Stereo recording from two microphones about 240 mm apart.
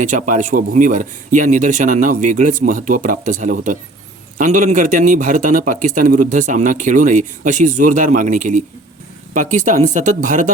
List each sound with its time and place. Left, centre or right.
0.0 s a man's voice: right